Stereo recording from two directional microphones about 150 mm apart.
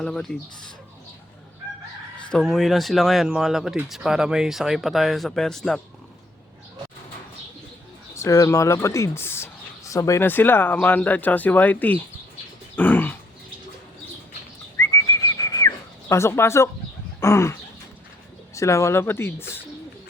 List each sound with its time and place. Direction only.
0.0 s speech: 5° left (ahead or behind)
2.3 s speech: centre (ahead or behind)
8.1 s speech: 20° left (ahead or behind)
12.7 s dog: 10° left (ahead or behind)
14.8 s whistling: 20° left (ahead or behind)
17.2 s a sound: 20° left (ahead or behind)
18.5 s speech: 20° left (ahead or behind)